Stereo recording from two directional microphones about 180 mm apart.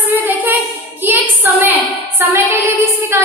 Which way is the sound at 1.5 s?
10° right (ahead or behind).